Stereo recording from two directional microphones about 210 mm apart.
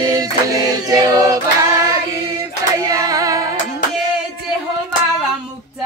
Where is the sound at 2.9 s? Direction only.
15° right (ahead or behind).